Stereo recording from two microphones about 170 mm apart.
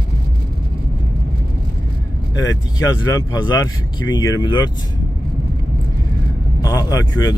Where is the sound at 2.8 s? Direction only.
20° left (ahead or behind).